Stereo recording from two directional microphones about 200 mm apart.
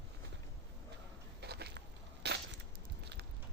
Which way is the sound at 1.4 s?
55° right (ahead or behind).